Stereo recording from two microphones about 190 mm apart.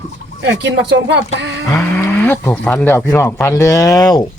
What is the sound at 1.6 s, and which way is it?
Speech, 15° left (ahead or behind).